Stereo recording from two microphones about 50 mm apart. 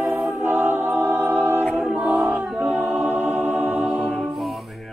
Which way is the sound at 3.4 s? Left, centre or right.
Right.